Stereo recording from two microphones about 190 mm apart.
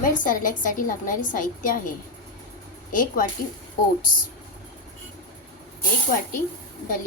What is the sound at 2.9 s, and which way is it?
Speech, 45° left (ahead or behind).